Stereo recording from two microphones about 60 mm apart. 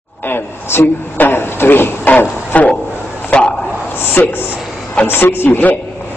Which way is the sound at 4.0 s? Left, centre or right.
Left.